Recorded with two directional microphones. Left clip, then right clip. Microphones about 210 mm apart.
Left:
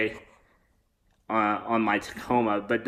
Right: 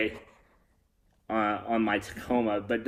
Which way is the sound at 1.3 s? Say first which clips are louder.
Left 3 dB; 30° right (ahead or behind).